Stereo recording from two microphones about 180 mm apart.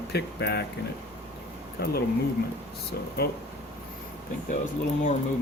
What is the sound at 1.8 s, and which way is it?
Speech, 60° left (ahead or behind).